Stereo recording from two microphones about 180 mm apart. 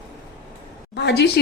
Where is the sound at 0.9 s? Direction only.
70° left (ahead or behind).